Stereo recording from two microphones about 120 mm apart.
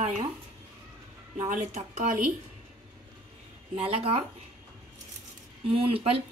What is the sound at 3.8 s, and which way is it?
Speech, 55° right (ahead or behind).